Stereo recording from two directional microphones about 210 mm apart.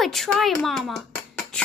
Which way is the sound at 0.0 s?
Centre (ahead or behind).